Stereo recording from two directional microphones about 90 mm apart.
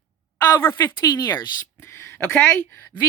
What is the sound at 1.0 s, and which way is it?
Speech, 45° left (ahead or behind).